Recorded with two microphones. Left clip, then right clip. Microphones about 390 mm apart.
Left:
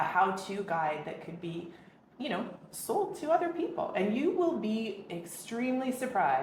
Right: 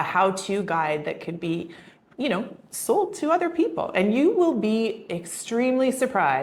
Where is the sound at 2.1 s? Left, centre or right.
Right.